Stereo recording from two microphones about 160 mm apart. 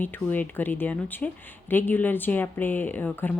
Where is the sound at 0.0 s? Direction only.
10° left (ahead or behind).